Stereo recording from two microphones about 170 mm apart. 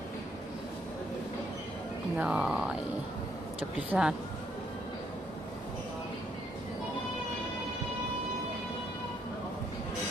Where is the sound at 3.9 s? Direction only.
5° right (ahead or behind).